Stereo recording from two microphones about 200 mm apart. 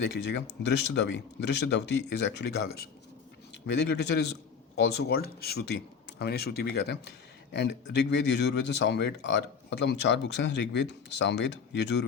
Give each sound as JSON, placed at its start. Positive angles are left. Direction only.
{"t": 0.0, "sound": "speech", "side_deg": 60}